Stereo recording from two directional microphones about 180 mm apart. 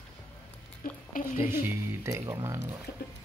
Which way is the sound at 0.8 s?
50° left (ahead or behind).